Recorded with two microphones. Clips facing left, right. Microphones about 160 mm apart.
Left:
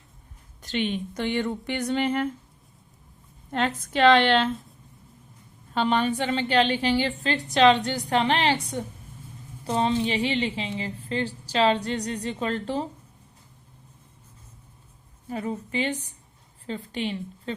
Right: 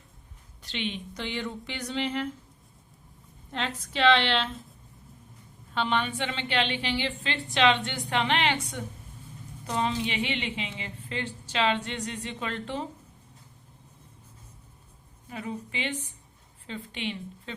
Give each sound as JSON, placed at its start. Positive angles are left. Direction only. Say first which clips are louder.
{"t": 0.6, "sound": "speech", "louder": "left 7 dB", "side_deg": 45}
{"t": 3.5, "sound": "speech", "louder": "left 7 dB", "side_deg": 50}
{"t": 5.7, "sound": "a woman's voice", "louder": "left 5 dB", "side_deg": 40}
{"t": 9.6, "sound": "a woman's voice", "louder": "left 5 dB", "side_deg": 30}
{"t": 15.3, "sound": "a woman's voice", "louder": "left 6 dB", "side_deg": 40}